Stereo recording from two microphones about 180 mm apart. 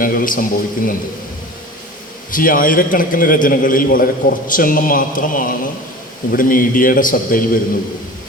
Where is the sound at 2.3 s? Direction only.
50° left (ahead or behind).